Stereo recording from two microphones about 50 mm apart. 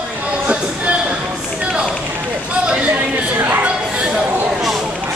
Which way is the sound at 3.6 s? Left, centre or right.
Centre.